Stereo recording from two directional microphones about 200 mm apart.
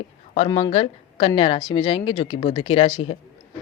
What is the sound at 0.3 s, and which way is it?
Speech, 25° left (ahead or behind).